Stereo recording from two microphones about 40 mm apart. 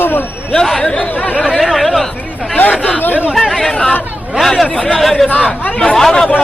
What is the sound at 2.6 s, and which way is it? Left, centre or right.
Speech, left.